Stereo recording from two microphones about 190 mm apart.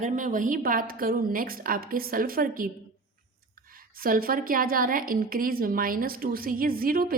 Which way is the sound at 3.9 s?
50° right (ahead or behind).